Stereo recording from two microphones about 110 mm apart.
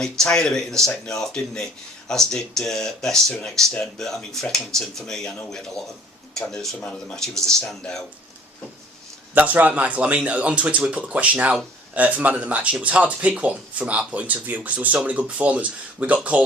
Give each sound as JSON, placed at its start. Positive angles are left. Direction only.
{"t": 0.0, "sound": "speech", "side_deg": 5}
{"t": 9.3, "sound": "speech", "side_deg": -15}